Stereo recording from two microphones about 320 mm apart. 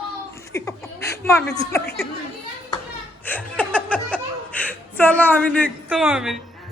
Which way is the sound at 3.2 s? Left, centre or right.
Centre.